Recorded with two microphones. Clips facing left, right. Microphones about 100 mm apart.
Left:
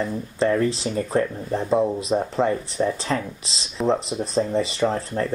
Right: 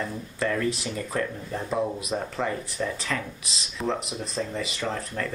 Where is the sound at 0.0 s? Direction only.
25° left (ahead or behind).